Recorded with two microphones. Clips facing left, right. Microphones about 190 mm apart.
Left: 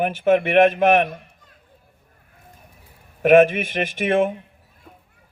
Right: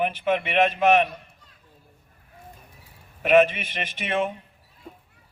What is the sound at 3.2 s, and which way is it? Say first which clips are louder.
A man's voice: left 5 dB; 50° left (ahead or behind).